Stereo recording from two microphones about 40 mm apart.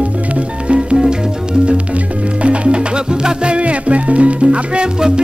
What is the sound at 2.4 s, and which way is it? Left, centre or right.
Music, right.